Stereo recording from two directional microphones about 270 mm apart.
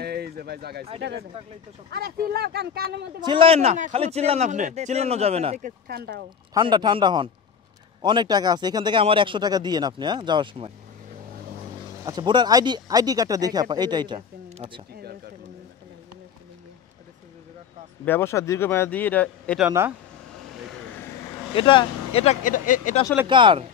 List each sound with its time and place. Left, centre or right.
0.0 s a sound: right
1.9 s speech: right
3.2 s speech: centre
5.9 s speech: right
6.5 s speech: centre
12.0 s speech: centre
18.0 s speech: centre
21.5 s speech: centre
23.2 s speech: centre